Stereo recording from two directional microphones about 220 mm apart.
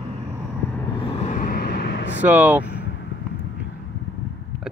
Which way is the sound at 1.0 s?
25° left (ahead or behind).